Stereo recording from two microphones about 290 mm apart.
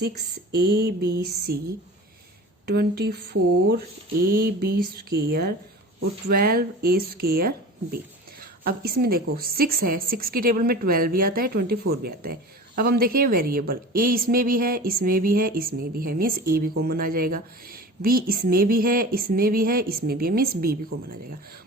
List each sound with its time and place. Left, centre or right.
0.0 s speech: right
2.6 s speech: right
4.3 s speech: right